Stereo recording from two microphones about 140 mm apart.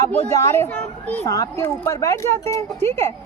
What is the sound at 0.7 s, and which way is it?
Speech, 10° left (ahead or behind).